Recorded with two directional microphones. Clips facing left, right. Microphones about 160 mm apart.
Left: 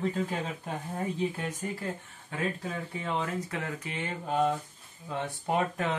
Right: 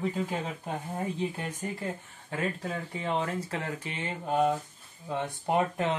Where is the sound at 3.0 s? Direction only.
35° right (ahead or behind).